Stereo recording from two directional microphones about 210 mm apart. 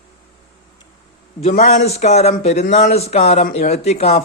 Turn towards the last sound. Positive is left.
turn(degrees=30)  # may be behind; listen again after turning